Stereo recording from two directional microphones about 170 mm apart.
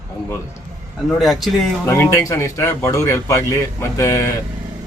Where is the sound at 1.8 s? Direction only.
15° left (ahead or behind).